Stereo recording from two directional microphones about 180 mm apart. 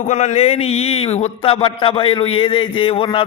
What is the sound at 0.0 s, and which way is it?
A man's voice, 40° left (ahead or behind).